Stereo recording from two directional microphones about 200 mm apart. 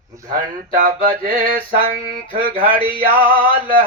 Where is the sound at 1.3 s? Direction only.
45° right (ahead or behind).